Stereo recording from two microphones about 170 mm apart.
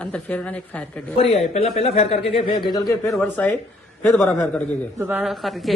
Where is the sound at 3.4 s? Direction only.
10° left (ahead or behind).